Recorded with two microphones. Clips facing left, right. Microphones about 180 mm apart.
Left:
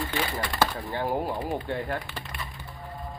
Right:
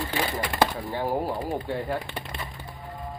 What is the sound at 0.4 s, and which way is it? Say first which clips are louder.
Speech: right 3 dB; 10° right (ahead or behind).